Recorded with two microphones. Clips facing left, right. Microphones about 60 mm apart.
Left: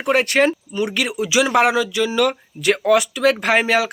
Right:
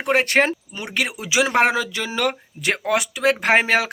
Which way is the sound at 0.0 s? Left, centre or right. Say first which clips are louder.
Left 2 dB; right.